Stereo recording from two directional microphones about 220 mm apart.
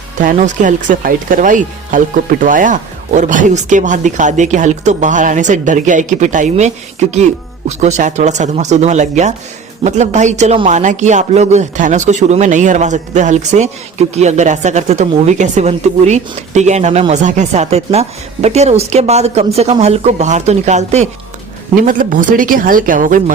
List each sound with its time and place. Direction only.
0.2 s speech: 35° right (ahead or behind)